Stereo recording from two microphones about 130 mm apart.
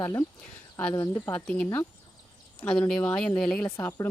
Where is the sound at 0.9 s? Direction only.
30° left (ahead or behind).